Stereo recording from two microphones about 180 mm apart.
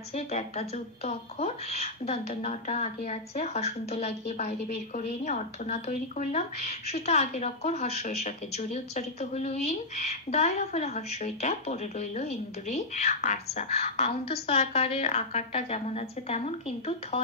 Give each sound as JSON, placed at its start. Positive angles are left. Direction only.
{"t": 0.1, "sound": "speech", "side_deg": 35}